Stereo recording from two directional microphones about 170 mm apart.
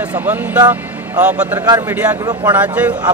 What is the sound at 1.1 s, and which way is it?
Speech, 20° right (ahead or behind).